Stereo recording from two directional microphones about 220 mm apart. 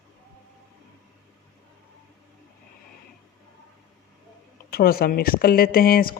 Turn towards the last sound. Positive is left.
turn(degrees=40)  # may be behind; listen again after turning